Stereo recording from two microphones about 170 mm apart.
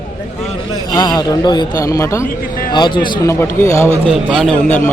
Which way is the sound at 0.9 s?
25° left (ahead or behind).